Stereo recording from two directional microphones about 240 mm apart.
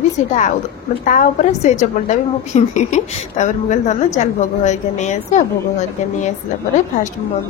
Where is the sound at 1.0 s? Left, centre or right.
Left.